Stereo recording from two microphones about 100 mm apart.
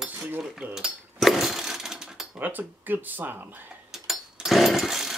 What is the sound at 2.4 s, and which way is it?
Speech, 20° right (ahead or behind).